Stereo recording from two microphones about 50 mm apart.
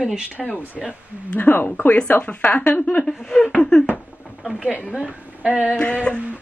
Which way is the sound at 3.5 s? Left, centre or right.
Centre.